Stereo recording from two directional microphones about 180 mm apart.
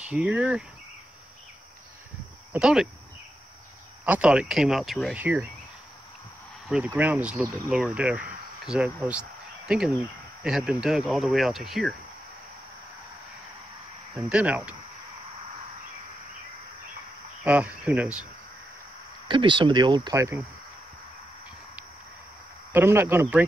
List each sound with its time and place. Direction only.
0.0 s speech: 5° right (ahead or behind)
2.5 s speech: 5° right (ahead or behind)
4.0 s speech: 5° right (ahead or behind)
6.9 s speech: 10° right (ahead or behind)
14.2 s speech: 10° right (ahead or behind)
17.4 s speech: 5° right (ahead or behind)
19.2 s speech: 25° right (ahead or behind)
22.7 s speech: 10° right (ahead or behind)